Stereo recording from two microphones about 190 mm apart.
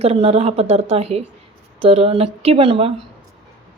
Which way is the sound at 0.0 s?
30° right (ahead or behind).